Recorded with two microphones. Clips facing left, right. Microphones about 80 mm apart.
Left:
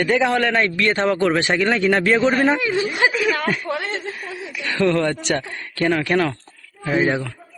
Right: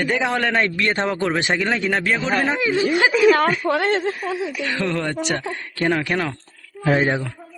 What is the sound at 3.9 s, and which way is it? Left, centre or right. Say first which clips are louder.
Speech: right 7 dB; right.